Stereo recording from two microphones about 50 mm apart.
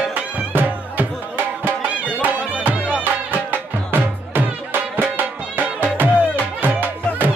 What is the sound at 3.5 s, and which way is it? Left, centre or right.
Music, right.